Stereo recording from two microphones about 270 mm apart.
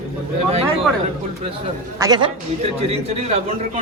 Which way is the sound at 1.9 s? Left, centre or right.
Centre.